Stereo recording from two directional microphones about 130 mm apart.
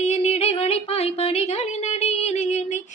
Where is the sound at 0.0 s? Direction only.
60° left (ahead or behind).